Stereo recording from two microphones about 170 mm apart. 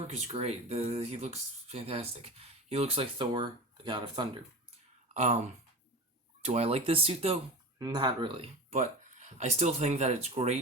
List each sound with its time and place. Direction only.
0.1 s speech: 40° right (ahead or behind)
5.1 s speech: 40° right (ahead or behind)
6.4 s speech: 40° right (ahead or behind)
8.7 s speech: 45° right (ahead or behind)